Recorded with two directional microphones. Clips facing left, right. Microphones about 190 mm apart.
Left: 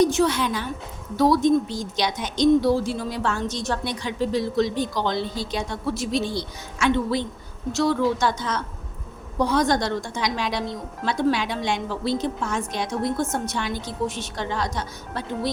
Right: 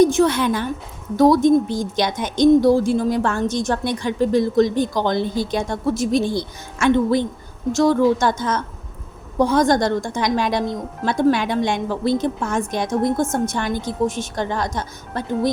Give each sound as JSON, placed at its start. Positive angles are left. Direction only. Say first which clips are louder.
{"t": 0.0, "sound": "a woman's voice", "louder": "right 5 dB", "side_deg": -50}